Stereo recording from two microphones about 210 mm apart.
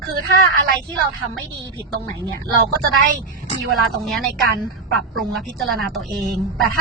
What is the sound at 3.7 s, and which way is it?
A woman's voice, centre (ahead or behind).